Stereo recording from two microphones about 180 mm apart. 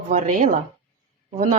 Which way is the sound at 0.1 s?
45° right (ahead or behind).